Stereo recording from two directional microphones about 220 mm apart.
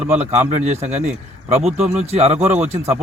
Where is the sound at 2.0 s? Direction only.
30° right (ahead or behind).